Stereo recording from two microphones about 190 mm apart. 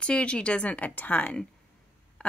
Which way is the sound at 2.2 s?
5° left (ahead or behind).